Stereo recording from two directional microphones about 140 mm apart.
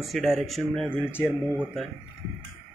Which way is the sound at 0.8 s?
15° left (ahead or behind).